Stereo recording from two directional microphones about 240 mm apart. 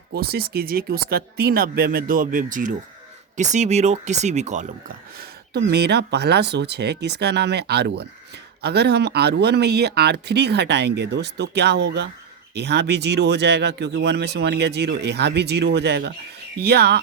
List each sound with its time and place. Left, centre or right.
0.1 s speech: right